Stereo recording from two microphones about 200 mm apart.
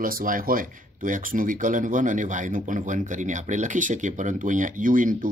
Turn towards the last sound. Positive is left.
turn(degrees=-40)  # may be behind; listen again after turning